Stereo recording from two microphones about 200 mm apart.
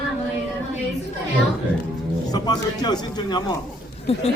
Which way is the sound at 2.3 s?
20° left (ahead or behind).